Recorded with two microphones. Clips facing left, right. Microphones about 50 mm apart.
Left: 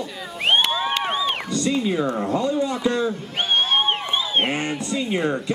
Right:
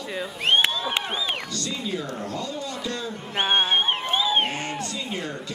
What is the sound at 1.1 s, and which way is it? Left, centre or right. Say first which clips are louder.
Crowd: left 5 dB; centre.